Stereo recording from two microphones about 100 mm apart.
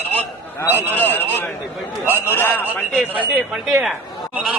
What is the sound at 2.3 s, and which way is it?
Speech, 20° left (ahead or behind).